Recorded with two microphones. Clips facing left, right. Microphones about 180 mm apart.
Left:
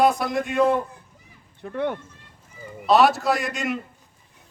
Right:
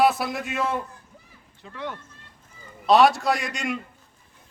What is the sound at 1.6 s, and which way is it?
Speech, 55° left (ahead or behind).